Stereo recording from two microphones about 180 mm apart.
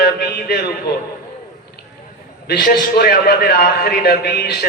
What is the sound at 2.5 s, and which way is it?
A man's voice, 55° left (ahead or behind).